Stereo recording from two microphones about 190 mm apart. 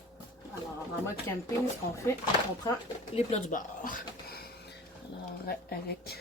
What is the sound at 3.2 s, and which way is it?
Speech, 40° left (ahead or behind).